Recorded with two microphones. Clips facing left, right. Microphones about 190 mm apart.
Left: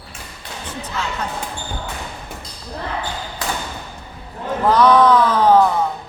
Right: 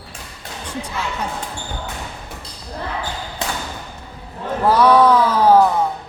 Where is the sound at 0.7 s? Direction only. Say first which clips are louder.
Right 1 dB; 10° right (ahead or behind).